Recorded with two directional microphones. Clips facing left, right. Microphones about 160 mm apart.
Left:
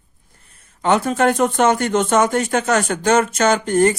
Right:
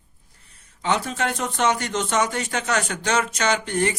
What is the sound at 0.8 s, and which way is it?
Speech, 50° left (ahead or behind).